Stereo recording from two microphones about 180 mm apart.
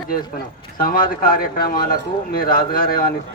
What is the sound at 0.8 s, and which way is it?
A man's voice, 50° left (ahead or behind).